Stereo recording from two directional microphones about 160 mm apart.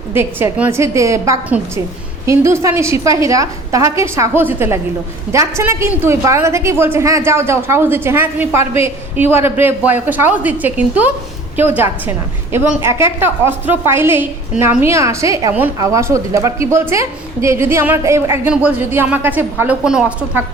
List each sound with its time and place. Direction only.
0.1 s a woman's voice: 15° right (ahead or behind)